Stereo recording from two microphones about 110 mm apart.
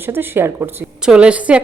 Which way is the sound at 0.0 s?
20° right (ahead or behind).